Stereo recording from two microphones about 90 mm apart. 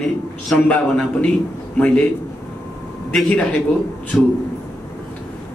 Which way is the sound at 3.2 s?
10° left (ahead or behind).